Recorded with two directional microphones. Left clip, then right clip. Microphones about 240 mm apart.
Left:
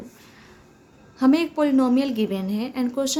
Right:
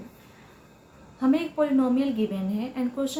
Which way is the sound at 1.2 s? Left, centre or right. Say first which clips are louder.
Left 4 dB; left.